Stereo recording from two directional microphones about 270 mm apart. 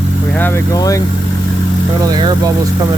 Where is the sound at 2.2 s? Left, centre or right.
Centre.